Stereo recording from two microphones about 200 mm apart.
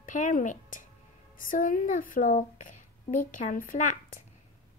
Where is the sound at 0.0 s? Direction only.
40° left (ahead or behind).